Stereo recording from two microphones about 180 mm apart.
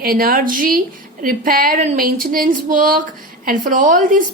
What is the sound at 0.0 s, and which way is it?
A woman's voice, 55° right (ahead or behind).